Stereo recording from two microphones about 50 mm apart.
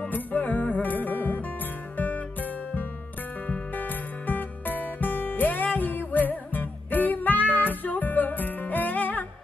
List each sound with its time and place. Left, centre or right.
0.1 s music: left